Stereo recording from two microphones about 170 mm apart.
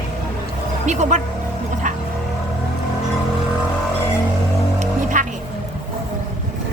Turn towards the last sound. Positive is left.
turn(degrees=-50)  # may be behind; listen again after turning